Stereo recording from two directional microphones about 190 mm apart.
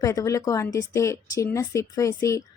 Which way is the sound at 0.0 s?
15° left (ahead or behind).